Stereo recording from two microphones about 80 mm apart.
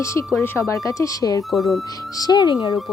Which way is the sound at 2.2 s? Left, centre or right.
Left.